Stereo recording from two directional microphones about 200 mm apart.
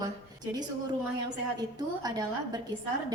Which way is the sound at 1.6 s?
20° right (ahead or behind).